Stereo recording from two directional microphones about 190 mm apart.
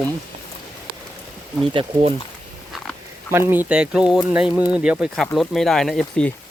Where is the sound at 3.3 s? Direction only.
10° right (ahead or behind).